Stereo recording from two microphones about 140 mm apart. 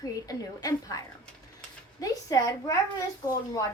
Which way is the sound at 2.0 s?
25° left (ahead or behind).